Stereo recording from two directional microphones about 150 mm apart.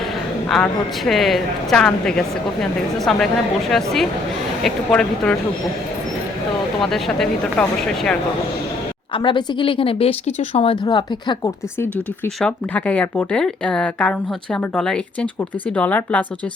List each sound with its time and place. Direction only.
0.4 s speech: 5° left (ahead or behind)
6.9 s speech: centre (ahead or behind)
9.1 s speech: 30° left (ahead or behind)
12.4 s speech: 10° left (ahead or behind)